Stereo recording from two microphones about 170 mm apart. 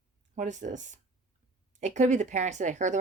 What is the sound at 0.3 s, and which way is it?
A woman's voice, 45° right (ahead or behind).